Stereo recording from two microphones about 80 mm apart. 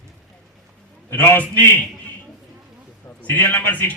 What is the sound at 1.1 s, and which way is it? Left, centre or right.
Speech, left.